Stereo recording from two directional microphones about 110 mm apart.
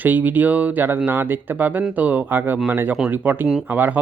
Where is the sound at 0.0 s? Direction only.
15° right (ahead or behind).